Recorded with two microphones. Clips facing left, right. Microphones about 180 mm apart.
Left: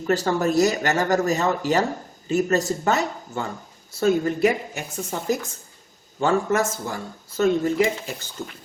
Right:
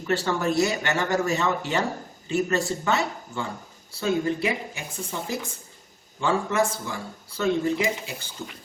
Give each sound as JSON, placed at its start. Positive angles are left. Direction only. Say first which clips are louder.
{"t": 0.1, "sound": "speech", "louder": "left 3 dB", "side_deg": 40}